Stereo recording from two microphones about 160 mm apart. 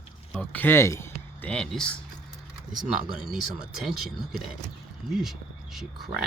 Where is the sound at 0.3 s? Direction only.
10° left (ahead or behind).